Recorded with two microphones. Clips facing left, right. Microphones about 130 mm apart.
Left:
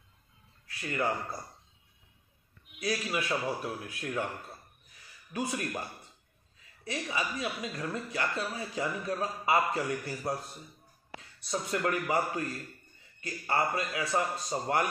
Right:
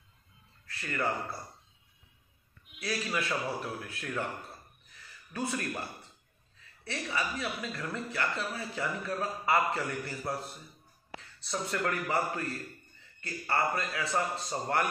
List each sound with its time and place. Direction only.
0.7 s speech: 15° left (ahead or behind)
2.8 s speech: 15° left (ahead or behind)
5.3 s speech: 15° left (ahead or behind)
6.8 s a man's voice: 15° left (ahead or behind)